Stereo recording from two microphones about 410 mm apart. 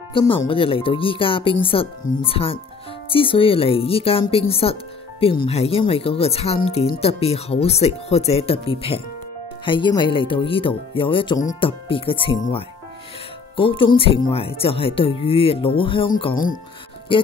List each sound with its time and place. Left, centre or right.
0.1 s speech: centre
13.6 s speech: centre